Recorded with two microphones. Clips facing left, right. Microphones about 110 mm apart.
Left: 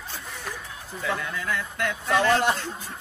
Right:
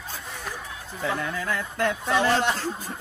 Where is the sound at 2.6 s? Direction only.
45° right (ahead or behind).